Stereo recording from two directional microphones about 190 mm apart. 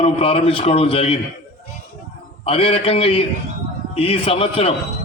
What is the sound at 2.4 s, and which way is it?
A man's voice, 30° left (ahead or behind).